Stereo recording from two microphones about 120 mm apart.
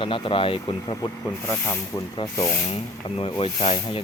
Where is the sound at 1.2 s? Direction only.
15° left (ahead or behind).